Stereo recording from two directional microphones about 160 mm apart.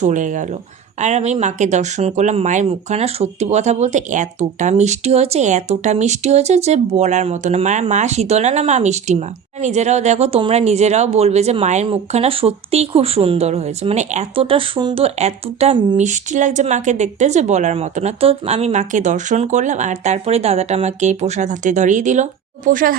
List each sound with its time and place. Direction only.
0.0 s a woman's voice: 50° right (ahead or behind); by 16.0 s 35° right (ahead or behind)
16.0 s a woman's voice: 45° right (ahead or behind)